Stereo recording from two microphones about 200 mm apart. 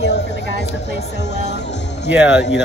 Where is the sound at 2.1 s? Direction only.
5° right (ahead or behind).